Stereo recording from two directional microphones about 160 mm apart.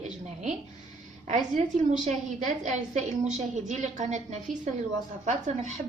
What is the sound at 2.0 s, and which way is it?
A woman's voice, 50° right (ahead or behind).